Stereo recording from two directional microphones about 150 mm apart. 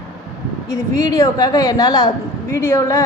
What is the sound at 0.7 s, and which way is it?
A woman's voice, 20° left (ahead or behind).